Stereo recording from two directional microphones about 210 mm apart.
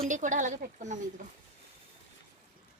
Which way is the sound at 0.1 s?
35° right (ahead or behind).